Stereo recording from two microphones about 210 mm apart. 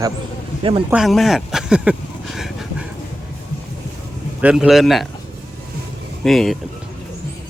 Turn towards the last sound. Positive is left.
turn(degrees=0)  # may be behind; listen again after turning